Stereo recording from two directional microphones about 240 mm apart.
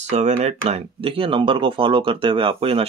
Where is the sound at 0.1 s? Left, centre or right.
Right.